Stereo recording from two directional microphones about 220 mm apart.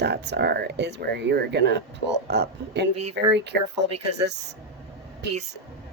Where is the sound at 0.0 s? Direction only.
50° right (ahead or behind).